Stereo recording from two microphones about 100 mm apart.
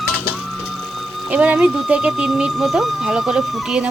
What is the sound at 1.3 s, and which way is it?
Speech, 10° right (ahead or behind).